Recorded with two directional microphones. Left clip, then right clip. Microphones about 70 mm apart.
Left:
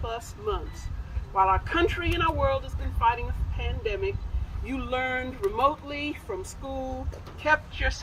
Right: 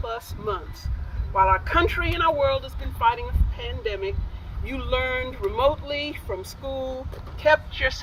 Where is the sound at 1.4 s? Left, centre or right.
Left.